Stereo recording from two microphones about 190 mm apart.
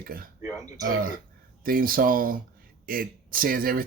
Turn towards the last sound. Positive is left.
turn(degrees=-50)  # may be behind; listen again after turning